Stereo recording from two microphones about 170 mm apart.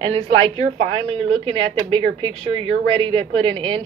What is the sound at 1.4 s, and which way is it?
A woman's voice, 30° right (ahead or behind).